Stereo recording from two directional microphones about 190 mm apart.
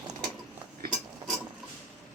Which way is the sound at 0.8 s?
50° right (ahead or behind).